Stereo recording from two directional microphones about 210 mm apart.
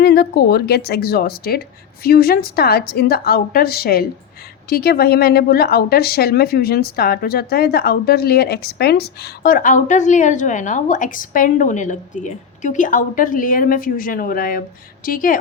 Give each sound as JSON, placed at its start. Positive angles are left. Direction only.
{"t": 0.0, "sound": "a woman's voice", "side_deg": 50}